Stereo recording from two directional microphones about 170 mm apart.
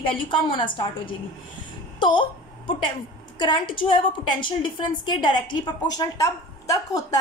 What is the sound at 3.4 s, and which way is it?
A woman's voice, 30° left (ahead or behind).